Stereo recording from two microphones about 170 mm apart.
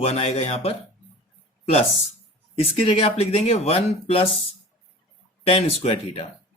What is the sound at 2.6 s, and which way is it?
Speech, 35° left (ahead or behind).